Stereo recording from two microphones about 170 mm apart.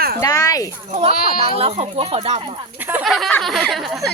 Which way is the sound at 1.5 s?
35° right (ahead or behind).